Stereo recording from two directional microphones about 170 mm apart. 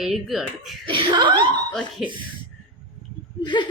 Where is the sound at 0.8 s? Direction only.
25° right (ahead or behind).